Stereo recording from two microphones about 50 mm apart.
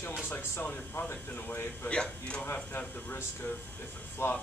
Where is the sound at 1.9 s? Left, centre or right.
Left.